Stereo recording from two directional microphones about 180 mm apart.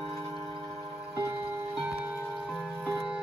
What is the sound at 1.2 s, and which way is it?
Music, 15° right (ahead or behind).